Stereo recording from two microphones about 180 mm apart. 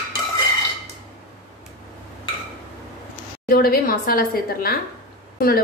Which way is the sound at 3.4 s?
55° left (ahead or behind).